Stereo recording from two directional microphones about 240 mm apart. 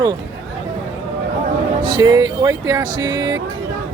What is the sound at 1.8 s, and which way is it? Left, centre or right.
Speech, centre.